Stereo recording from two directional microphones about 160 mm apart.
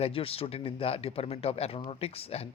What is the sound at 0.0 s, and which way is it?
Speech, 35° left (ahead or behind).